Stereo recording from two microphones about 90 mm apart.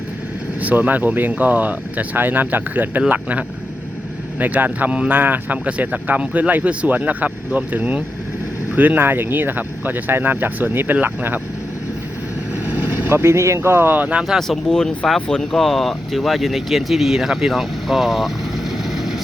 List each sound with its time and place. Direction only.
0.6 s speech: 20° right (ahead or behind)
12.7 s speech: 20° right (ahead or behind)
14.3 s speech: centre (ahead or behind)
18.9 s vehicle: centre (ahead or behind)